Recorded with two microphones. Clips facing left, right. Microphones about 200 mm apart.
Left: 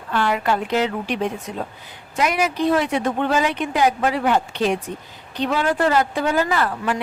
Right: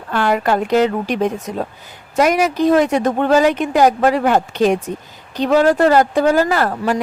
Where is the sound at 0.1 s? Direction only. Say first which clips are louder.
Right 4 dB; 45° right (ahead or behind).